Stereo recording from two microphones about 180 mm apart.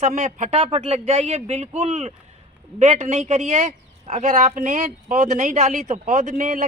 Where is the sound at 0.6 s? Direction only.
30° right (ahead or behind).